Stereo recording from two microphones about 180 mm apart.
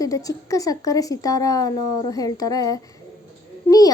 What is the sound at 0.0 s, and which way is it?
Speech, 20° left (ahead or behind).